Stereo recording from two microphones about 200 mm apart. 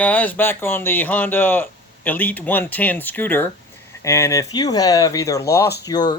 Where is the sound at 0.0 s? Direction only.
10° left (ahead or behind).